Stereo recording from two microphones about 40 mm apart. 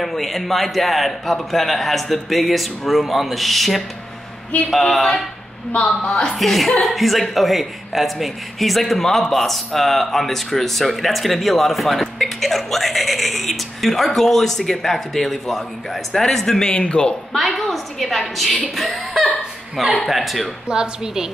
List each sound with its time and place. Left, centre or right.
0.0 s speech: centre
5.7 s a woman's voice: left
6.3 s speech: centre
16.6 s speech: left
17.4 s speech: centre
20.6 s a woman's voice: centre